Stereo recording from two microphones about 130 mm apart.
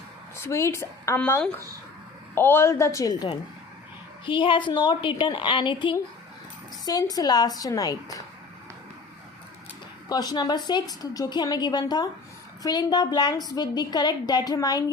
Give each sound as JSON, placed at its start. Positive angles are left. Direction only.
{"t": 0.3, "sound": "a woman's voice", "side_deg": 20}
{"t": 2.3, "sound": "a woman's voice", "side_deg": 15}
{"t": 10.1, "sound": "a woman's voice", "side_deg": 30}